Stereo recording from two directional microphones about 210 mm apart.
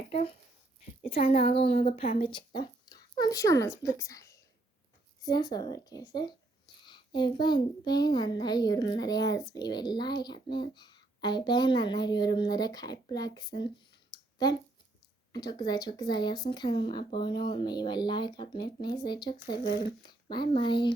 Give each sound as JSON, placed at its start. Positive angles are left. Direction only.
{"t": 1.1, "sound": "speech", "side_deg": 25}
{"t": 15.3, "sound": "speech", "side_deg": 20}